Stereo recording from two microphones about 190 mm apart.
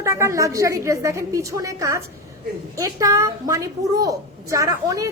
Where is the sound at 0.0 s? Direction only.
15° right (ahead or behind).